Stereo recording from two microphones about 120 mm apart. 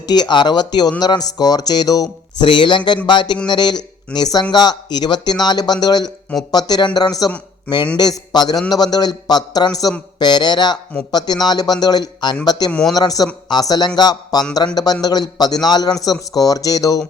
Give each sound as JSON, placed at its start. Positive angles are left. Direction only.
{"t": 0.0, "sound": "speech", "side_deg": 35}